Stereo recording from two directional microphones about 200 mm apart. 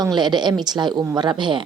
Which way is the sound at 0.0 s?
20° right (ahead or behind).